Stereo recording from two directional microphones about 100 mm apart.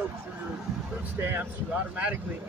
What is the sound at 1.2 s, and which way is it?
Speech, 20° right (ahead or behind).